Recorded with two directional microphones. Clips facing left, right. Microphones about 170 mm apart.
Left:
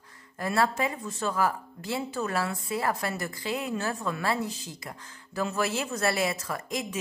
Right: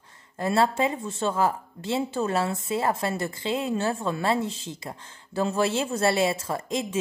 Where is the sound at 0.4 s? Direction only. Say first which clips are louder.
Right 4 dB; 25° right (ahead or behind).